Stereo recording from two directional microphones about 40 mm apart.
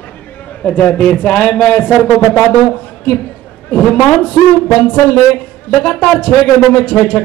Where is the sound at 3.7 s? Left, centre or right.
Left.